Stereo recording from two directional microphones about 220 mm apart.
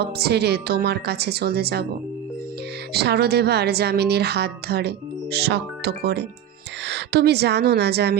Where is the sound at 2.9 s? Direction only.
50° right (ahead or behind).